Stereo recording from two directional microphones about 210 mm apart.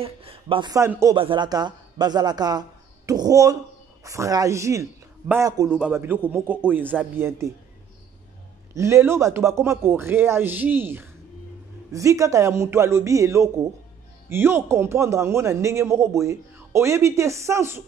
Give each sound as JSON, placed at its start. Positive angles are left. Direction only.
{"t": 0.0, "sound": "speech", "side_deg": -25}
{"t": 1.1, "sound": "a man's voice", "side_deg": -25}
{"t": 8.7, "sound": "a man's voice", "side_deg": -15}